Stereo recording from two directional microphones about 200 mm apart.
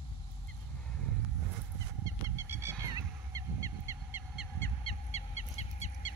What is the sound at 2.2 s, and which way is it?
Goose, 15° right (ahead or behind).